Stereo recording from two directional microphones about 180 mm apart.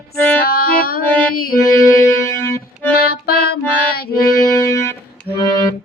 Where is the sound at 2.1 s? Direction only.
15° left (ahead or behind).